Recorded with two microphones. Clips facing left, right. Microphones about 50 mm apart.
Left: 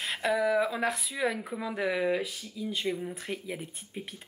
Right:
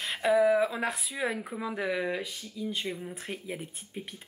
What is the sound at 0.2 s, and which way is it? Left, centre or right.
Speech, centre.